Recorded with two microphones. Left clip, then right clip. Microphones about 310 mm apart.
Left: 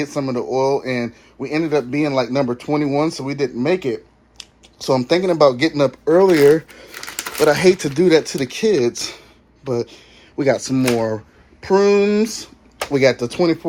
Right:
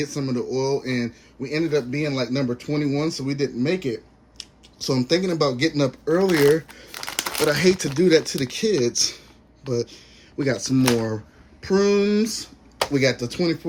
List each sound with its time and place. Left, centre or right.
0.0 s a man's voice: centre
7.5 s a man's voice: centre
8.7 s speech: left
9.7 s a man's voice: centre